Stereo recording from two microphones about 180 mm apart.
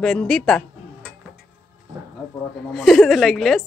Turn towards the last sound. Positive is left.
turn(degrees=0)  # may be behind; listen again after turning